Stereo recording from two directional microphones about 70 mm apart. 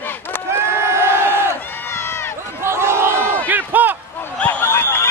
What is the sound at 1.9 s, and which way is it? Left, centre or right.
Run, left.